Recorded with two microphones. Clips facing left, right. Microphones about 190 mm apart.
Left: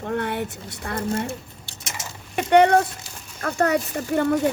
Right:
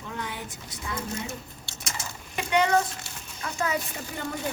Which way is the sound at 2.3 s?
60° left (ahead or behind).